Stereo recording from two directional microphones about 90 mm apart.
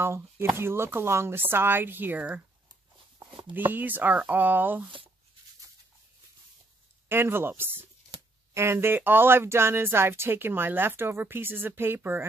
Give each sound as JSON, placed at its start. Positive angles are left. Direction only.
{"t": 0.0, "sound": "speech", "side_deg": -30}
{"t": 3.5, "sound": "speech", "side_deg": -20}
{"t": 7.1, "sound": "speech", "side_deg": -25}